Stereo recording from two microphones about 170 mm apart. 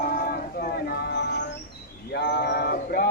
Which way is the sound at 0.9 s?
70° left (ahead or behind).